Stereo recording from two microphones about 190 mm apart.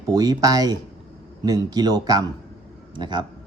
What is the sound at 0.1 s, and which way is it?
A man's voice, 20° right (ahead or behind).